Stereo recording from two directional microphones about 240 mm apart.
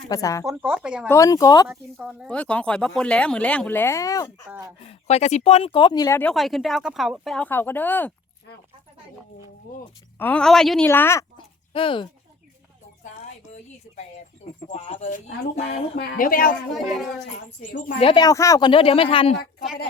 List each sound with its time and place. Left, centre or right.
0.1 s speech: centre
0.4 s speech: centre
1.0 s speech: centre
2.0 s speech: centre
4.4 s speech: centre
4.9 s speech: left; by 8.1 s centre
10.2 s speech: centre; by 12.0 s left
14.7 s speech: left
18.0 s speech: centre